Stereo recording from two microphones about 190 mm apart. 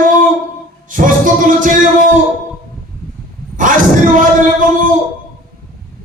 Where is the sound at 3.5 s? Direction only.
45° right (ahead or behind).